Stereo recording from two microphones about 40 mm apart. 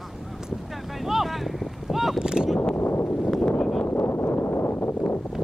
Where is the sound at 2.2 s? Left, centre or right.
Centre.